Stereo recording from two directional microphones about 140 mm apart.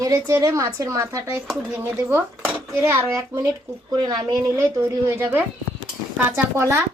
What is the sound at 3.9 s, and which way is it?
A woman's voice, 30° right (ahead or behind).